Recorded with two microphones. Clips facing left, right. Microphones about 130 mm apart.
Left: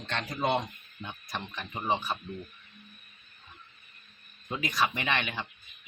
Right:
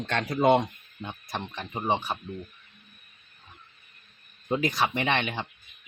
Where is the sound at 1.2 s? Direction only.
25° right (ahead or behind).